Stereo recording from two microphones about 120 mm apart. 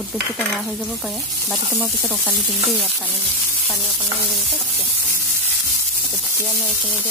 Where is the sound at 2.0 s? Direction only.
10° left (ahead or behind).